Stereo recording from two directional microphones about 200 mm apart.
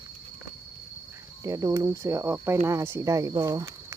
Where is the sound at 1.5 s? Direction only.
15° right (ahead or behind).